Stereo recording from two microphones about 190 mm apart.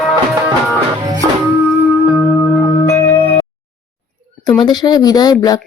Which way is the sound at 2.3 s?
20° left (ahead or behind).